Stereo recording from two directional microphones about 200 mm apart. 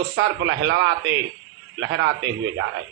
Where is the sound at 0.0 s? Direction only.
55° right (ahead or behind).